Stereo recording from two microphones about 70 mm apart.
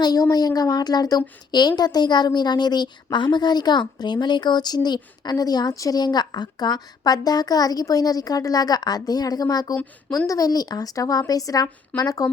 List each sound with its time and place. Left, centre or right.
0.0 s a woman's voice: left